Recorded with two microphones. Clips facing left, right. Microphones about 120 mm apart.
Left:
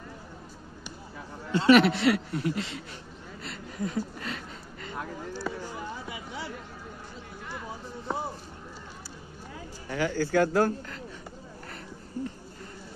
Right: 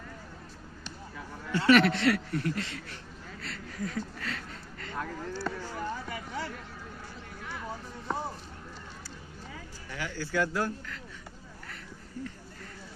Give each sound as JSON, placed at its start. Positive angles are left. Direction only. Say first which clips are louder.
{"t": 1.5, "sound": "a man's voice", "louder": "left 3 dB", "side_deg": 20}
{"t": 3.4, "sound": "a sound", "louder": "left 3 dB", "side_deg": 15}
{"t": 9.9, "sound": "speech", "louder": "left 7 dB", "side_deg": 45}